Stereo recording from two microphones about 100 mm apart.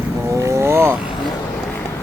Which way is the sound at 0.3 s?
30° right (ahead or behind).